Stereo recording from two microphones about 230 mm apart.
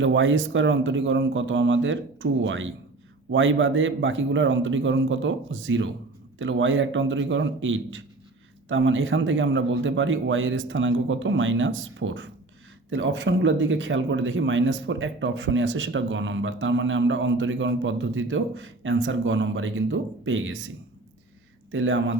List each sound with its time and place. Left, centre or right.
0.0 s speech: right
21.7 s speech: right